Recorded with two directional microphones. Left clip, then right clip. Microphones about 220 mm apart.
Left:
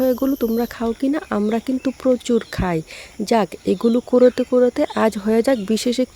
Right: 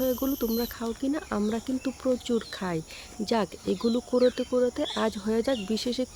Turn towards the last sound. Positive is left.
turn(degrees=35)  # may be behind; listen again after turning